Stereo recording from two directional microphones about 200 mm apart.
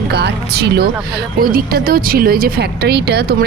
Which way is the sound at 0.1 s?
55° right (ahead or behind).